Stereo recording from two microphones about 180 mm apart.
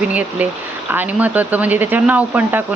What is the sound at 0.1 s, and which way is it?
Speech, 10° right (ahead or behind).